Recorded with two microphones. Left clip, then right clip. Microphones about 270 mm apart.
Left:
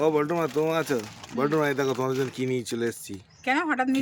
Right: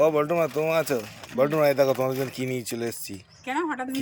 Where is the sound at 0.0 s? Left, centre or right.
Centre.